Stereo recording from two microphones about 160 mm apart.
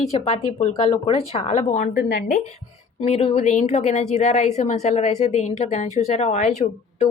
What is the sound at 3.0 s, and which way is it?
A woman's voice, 40° left (ahead or behind).